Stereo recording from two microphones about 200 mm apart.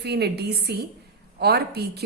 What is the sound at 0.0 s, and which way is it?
A woman's voice, 55° right (ahead or behind).